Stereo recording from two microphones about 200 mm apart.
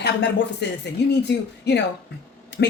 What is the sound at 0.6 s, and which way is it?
Speech, 60° left (ahead or behind).